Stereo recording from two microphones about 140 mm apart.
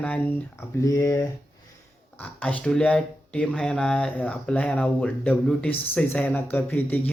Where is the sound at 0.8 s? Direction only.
25° left (ahead or behind).